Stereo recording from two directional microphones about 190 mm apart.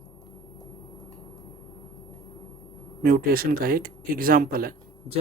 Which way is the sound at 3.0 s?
50° right (ahead or behind).